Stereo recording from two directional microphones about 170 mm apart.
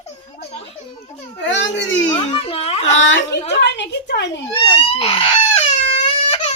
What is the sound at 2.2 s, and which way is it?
Speech, 35° left (ahead or behind).